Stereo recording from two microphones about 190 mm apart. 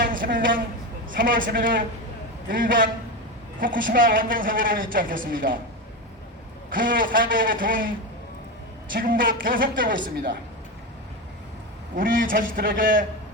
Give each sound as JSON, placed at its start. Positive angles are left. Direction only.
{"t": 0.0, "sound": "a woman's voice", "side_deg": -45}
{"t": 6.7, "sound": "a woman's voice", "side_deg": -45}
{"t": 9.0, "sound": "a woman's voice", "side_deg": -45}
{"t": 11.9, "sound": "a woman's voice", "side_deg": -45}